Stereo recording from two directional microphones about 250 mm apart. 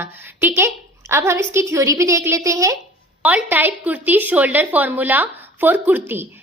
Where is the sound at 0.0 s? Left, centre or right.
Centre.